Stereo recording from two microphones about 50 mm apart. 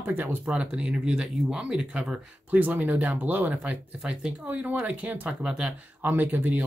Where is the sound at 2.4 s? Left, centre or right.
Right.